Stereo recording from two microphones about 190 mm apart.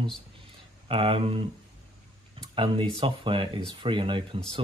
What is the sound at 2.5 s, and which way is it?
Speech, 25° right (ahead or behind).